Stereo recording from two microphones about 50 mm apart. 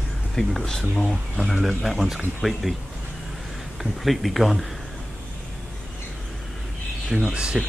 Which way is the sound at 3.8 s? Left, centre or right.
Centre.